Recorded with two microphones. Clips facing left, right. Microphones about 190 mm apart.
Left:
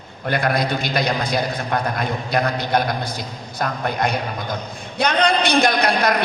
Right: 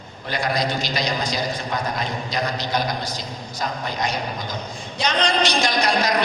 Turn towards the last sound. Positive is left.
turn(degrees=60)  # may be behind; listen again after turning